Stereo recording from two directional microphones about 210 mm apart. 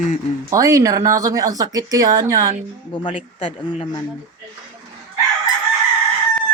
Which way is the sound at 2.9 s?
25° left (ahead or behind).